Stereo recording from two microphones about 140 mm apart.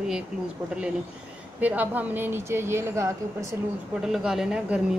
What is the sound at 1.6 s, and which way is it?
A woman's voice, 10° right (ahead or behind).